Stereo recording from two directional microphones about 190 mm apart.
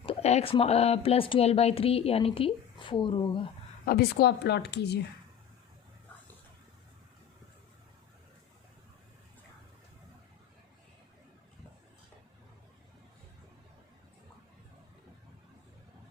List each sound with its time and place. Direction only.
0.0 s a woman's voice: 30° left (ahead or behind)
3.8 s speech: 55° left (ahead or behind)